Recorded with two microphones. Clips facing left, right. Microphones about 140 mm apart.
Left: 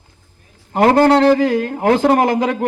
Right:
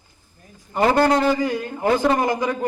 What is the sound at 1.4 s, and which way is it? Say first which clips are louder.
A man's voice: left 7 dB; 90° left.